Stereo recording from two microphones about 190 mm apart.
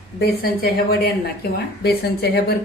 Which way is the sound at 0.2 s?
55° left (ahead or behind).